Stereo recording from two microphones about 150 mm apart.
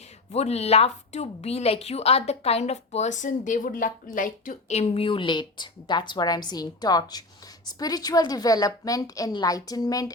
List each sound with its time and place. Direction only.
0.3 s a woman's voice: 45° left (ahead or behind); by 4.5 s 65° left (ahead or behind)
4.7 s a woman's voice: 45° left (ahead or behind); by 10.1 s 25° left (ahead or behind)